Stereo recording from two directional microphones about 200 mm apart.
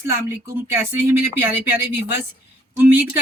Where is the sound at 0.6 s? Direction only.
10° right (ahead or behind).